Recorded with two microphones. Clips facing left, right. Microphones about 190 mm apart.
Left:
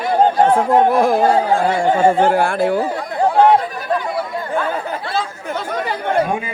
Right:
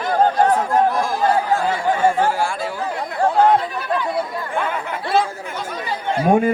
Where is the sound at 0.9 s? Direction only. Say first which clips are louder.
Left 7 dB; 65° left (ahead or behind).